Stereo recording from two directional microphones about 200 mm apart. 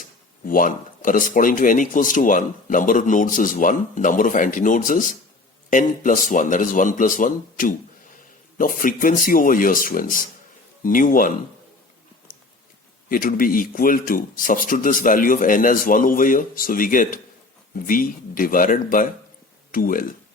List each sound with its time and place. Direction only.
0.4 s speech: 45° left (ahead or behind)
13.1 s speech: 45° left (ahead or behind)